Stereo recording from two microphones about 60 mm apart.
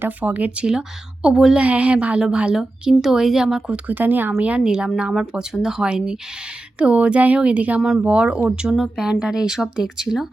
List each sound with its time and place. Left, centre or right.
0.2 s speech: right; by 1.6 s centre
1.6 s speech: right
3.8 s speech: right
4.4 s speech: centre